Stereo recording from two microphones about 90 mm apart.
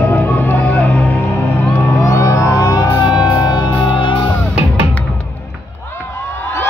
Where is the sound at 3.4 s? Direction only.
55° left (ahead or behind).